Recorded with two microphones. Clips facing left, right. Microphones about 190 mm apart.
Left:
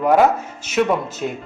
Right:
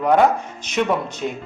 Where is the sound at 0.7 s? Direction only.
5° left (ahead or behind).